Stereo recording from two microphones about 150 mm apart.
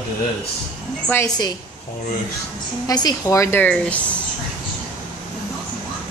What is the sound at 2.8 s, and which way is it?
A woman's voice, 25° left (ahead or behind).